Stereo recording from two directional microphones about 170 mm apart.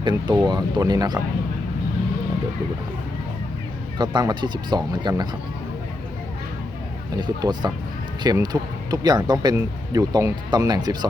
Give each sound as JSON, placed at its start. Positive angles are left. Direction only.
{"t": 0.0, "sound": "speech", "side_deg": -25}
{"t": 3.9, "sound": "speech", "side_deg": -25}
{"t": 7.2, "sound": "speech", "side_deg": -25}